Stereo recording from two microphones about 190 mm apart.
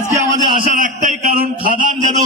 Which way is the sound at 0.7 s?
40° right (ahead or behind).